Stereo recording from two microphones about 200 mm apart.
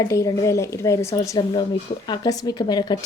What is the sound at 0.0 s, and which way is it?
Speech, 15° left (ahead or behind).